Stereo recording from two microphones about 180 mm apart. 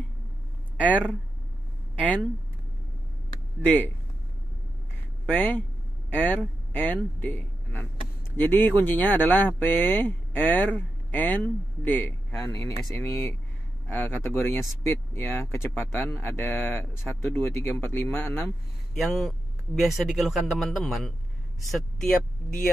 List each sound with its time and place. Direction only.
0.7 s speech: 10° right (ahead or behind)
3.6 s speech: 10° left (ahead or behind)
5.3 s speech: 10° left (ahead or behind)
18.9 s speech: centre (ahead or behind)